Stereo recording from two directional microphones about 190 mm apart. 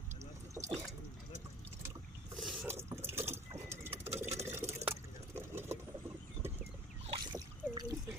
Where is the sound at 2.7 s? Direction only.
15° right (ahead or behind).